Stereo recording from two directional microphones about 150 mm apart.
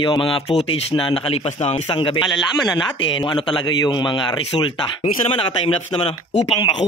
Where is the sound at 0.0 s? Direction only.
35° left (ahead or behind).